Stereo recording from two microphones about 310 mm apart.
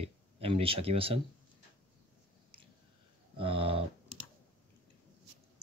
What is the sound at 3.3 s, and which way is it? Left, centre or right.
Speech, centre.